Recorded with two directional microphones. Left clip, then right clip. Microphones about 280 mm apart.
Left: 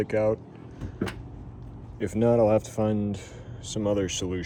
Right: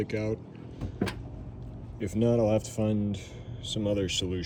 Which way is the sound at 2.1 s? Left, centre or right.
Left.